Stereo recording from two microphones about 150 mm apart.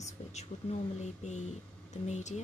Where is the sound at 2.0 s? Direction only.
50° left (ahead or behind).